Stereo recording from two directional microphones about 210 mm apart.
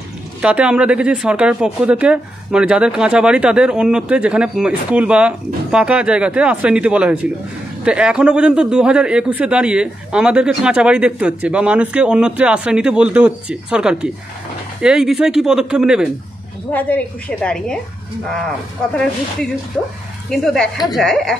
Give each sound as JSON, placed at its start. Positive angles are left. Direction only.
{"t": 0.4, "sound": "speech", "side_deg": -5}
{"t": 20.2, "sound": "speech", "side_deg": 5}